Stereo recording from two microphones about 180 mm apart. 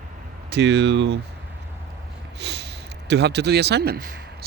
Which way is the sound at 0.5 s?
75° right (ahead or behind).